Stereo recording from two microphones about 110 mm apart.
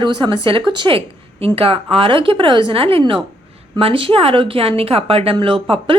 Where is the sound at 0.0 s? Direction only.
45° right (ahead or behind).